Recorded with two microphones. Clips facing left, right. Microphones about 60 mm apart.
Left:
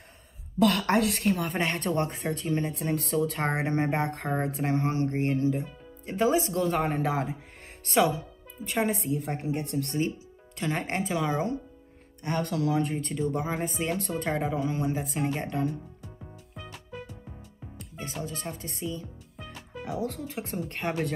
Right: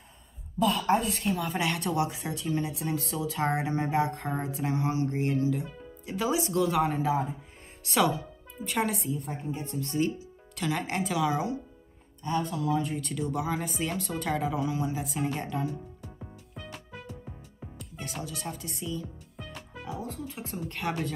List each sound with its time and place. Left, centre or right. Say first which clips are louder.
0.6 s a woman's voice: left 2 dB; left
1.5 s speech: left 1 dB; left
7.9 s speech: left 2 dB; left
9.1 s a woman's voice: left 4 dB; left
10.6 s speech: even; left
12.2 s speech: left 1 dB; left
12.8 s speech: left 3 dB; left
14.8 s speech: left 2 dB; left
17.9 s speech: left 2 dB; left
19.8 s a woman's voice: left 5 dB; left
20.6 s speech: right 2 dB; left